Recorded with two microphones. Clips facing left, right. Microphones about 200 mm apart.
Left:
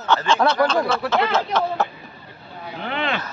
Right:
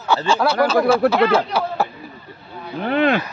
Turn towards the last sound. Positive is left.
turn(degrees=-45)  # may be behind; listen again after turning